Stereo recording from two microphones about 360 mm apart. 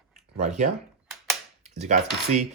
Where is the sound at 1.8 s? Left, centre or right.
Centre.